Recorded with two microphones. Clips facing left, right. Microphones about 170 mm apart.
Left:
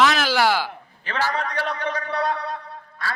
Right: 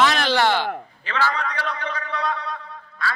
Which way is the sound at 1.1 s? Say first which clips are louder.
Even; 40° left (ahead or behind).